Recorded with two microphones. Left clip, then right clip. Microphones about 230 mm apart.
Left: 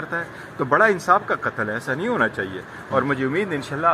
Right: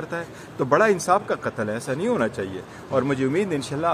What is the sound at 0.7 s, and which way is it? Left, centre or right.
A man's voice, right.